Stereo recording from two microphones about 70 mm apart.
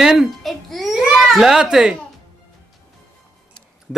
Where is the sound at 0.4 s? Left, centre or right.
Centre.